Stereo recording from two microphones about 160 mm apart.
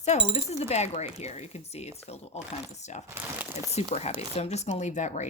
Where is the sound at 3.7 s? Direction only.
40° left (ahead or behind).